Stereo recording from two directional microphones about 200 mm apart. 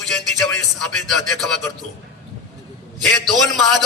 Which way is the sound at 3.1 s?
Centre (ahead or behind).